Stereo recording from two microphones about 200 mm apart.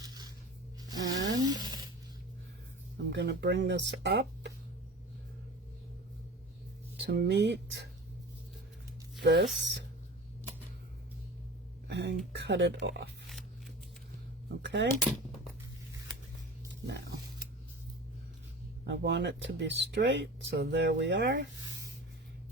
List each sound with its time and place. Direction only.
0.9 s a sound: 20° right (ahead or behind)
3.1 s speech: 60° right (ahead or behind)
7.0 s speech: 55° right (ahead or behind)
9.2 s speech: 55° right (ahead or behind)
11.9 s a sound: 60° right (ahead or behind)
12.4 s speech: 55° right (ahead or behind)
14.6 s speech: 60° right (ahead or behind)
16.8 s speech: 60° right (ahead or behind)
18.9 s speech: 60° right (ahead or behind)